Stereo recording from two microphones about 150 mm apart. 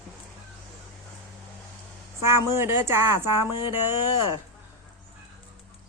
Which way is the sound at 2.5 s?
15° right (ahead or behind).